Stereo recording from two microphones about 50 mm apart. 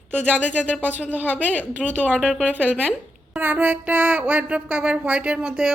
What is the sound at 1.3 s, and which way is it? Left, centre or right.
Speech, left.